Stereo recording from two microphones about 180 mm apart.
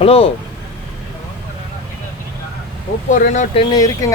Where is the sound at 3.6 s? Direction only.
20° left (ahead or behind).